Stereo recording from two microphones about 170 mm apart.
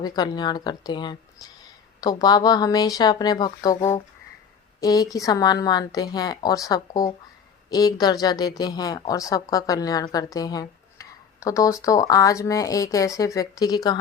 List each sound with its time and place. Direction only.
0.0 s a woman's voice: 25° left (ahead or behind)